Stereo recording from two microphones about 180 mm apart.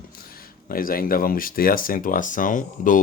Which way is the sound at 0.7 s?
55° left (ahead or behind).